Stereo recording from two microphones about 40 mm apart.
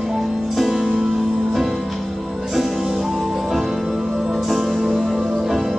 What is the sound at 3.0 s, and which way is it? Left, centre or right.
Music, centre.